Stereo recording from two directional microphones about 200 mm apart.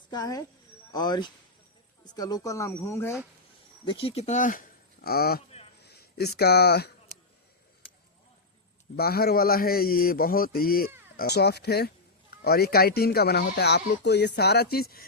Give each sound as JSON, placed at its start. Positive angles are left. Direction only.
{"t": 0.1, "sound": "speech", "side_deg": 20}
{"t": 3.8, "sound": "speech", "side_deg": 25}
{"t": 9.0, "sound": "a man's voice", "side_deg": 50}